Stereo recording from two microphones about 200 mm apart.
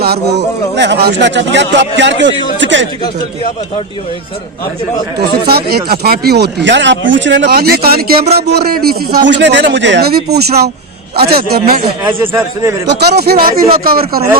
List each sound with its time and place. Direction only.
0.0 s speech: 55° right (ahead or behind)
4.9 s speech: 25° left (ahead or behind)
5.5 s speech: 50° right (ahead or behind)
12.0 s a man's voice: 10° right (ahead or behind)
12.9 s speech: 55° right (ahead or behind)